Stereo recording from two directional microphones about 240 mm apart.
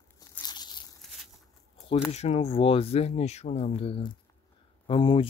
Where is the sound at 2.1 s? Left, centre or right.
Left.